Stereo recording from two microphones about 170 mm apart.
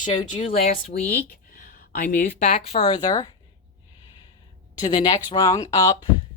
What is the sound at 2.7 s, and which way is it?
Speech, 35° left (ahead or behind).